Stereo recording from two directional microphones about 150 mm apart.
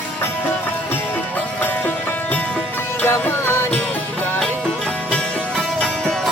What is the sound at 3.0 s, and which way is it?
Music, 15° left (ahead or behind).